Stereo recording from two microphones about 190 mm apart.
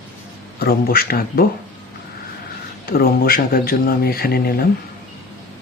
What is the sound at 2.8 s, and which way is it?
Speech, 50° left (ahead or behind).